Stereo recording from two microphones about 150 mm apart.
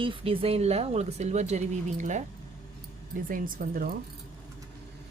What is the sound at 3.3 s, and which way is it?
Speech, 70° right (ahead or behind).